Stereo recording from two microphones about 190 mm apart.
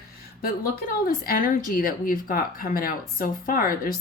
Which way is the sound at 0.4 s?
50° left (ahead or behind).